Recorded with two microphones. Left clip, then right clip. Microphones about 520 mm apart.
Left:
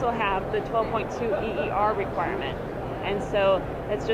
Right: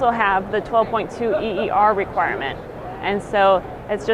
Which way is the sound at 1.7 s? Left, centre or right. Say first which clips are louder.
Right 9 dB; right.